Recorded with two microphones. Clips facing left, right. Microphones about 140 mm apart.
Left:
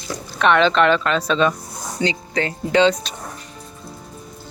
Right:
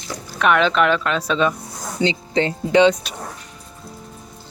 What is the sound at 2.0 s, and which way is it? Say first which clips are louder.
Speech: right 3 dB; 25° right (ahead or behind).